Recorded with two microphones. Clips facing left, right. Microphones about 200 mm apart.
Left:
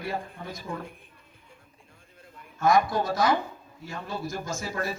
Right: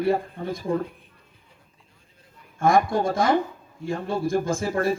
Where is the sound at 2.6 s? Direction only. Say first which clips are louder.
Right 3 dB; 50° right (ahead or behind).